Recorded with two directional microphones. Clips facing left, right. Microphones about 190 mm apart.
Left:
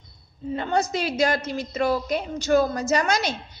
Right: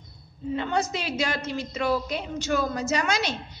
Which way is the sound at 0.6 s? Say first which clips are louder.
Left 3 dB; 40° left (ahead or behind).